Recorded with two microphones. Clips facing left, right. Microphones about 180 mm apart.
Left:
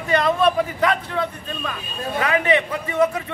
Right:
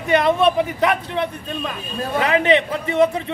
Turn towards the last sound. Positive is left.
turn(degrees=-30)  # may be behind; listen again after turning